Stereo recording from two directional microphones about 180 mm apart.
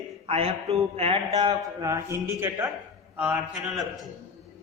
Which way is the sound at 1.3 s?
20° right (ahead or behind).